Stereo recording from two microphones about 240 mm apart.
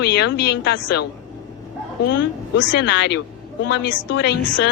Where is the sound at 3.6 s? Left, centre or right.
Left.